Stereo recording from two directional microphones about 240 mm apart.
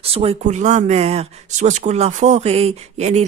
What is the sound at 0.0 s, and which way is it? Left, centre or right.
Speech, right.